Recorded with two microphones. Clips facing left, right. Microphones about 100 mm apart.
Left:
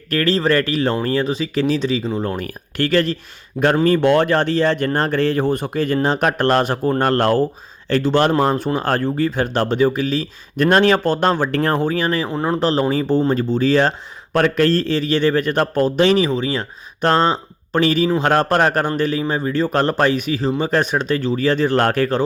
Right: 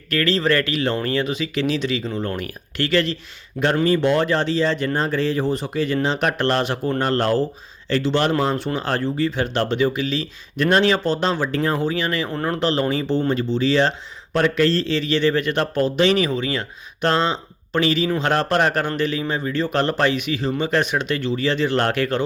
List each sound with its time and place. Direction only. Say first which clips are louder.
0.1 s speech: left 2 dB; 40° left (ahead or behind)
3.8 s speech: left 3 dB; 55° left (ahead or behind)
11.9 s speech: left 3 dB; 45° left (ahead or behind)
12.3 s speech: left 3 dB; 15° left (ahead or behind)
12.5 s speech: left 3 dB; 40° left (ahead or behind)